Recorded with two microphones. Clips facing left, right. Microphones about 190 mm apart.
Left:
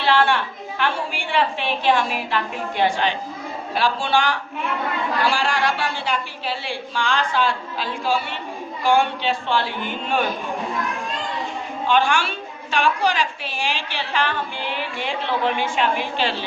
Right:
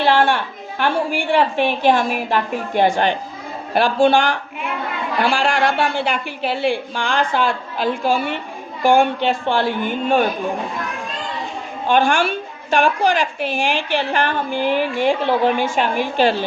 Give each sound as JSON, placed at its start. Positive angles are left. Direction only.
{"t": 0.0, "sound": "a sound", "side_deg": -45}
{"t": 0.8, "sound": "a woman's voice", "side_deg": -45}
{"t": 11.9, "sound": "a woman's voice", "side_deg": -45}